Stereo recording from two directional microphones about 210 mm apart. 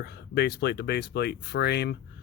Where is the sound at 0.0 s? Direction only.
50° left (ahead or behind).